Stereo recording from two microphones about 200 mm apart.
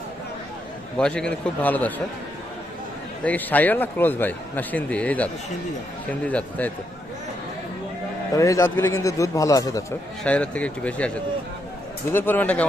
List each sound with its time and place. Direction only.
0.9 s a man's voice: 5° left (ahead or behind)
3.2 s speech: 10° left (ahead or behind)
8.4 s speech: 15° left (ahead or behind)
10.2 s speech: 5° left (ahead or behind)